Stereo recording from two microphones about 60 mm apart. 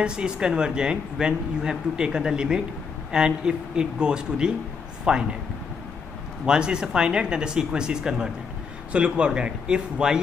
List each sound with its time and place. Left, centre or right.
0.0 s speech: centre
6.4 s speech: centre